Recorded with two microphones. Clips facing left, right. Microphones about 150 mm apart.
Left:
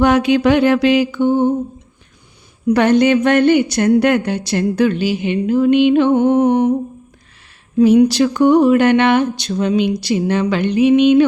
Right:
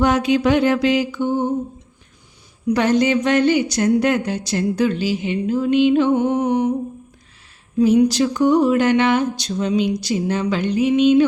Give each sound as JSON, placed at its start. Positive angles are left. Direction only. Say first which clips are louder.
{"t": 0.0, "sound": "mantra", "louder": "left 4 dB", "side_deg": 65}
{"t": 2.6, "sound": "speech", "louder": "left 5 dB", "side_deg": 60}
{"t": 7.8, "sound": "speech", "louder": "left 4 dB", "side_deg": 70}